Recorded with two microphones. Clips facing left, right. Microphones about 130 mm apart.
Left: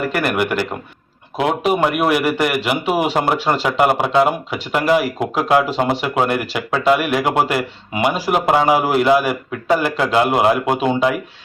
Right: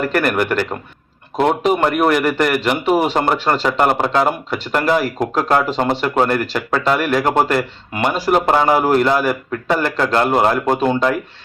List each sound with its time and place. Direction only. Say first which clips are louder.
0.1 s a man's voice: right 2 dB; 10° left (ahead or behind)